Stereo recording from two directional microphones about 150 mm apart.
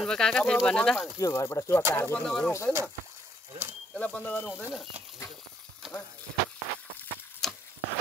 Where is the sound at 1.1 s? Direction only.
20° left (ahead or behind); by 2.5 s 5° left (ahead or behind).